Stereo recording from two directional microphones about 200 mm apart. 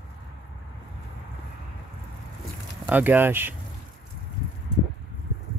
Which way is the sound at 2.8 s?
10° right (ahead or behind).